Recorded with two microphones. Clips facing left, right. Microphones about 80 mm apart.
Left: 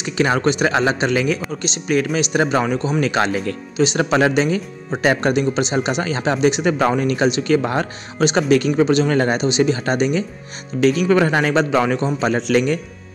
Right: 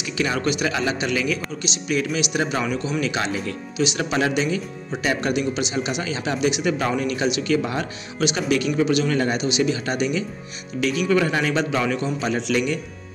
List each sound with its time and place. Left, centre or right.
0.0 s speech: left